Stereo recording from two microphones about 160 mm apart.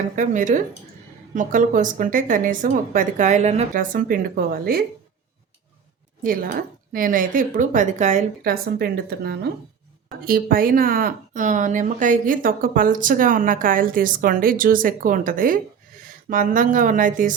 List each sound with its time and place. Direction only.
0.2 s speech: 55° right (ahead or behind)
6.2 s speech: 60° right (ahead or behind)
8.4 s speech: 70° right (ahead or behind)
10.2 s speech: 65° right (ahead or behind)